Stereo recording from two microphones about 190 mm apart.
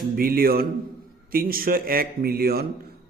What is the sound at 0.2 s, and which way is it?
Speech, 50° right (ahead or behind).